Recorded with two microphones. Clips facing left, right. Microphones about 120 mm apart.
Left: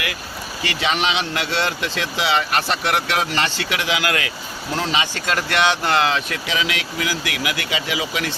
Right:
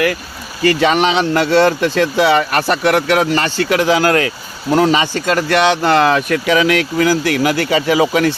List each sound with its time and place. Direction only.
0.6 s speech: 45° right (ahead or behind)